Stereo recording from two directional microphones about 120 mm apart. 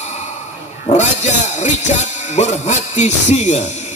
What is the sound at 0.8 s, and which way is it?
Speech, 75° left (ahead or behind).